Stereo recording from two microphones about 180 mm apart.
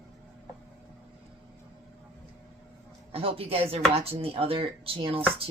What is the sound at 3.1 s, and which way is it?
Speech, 30° right (ahead or behind).